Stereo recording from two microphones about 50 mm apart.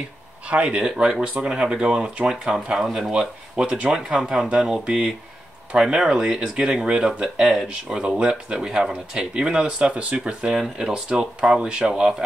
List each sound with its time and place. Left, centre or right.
0.5 s speech: right; by 3.1 s centre
3.1 s speech: centre
10.5 s speech: centre